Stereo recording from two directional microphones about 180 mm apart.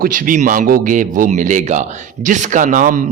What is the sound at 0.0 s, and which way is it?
A man's voice, 50° right (ahead or behind).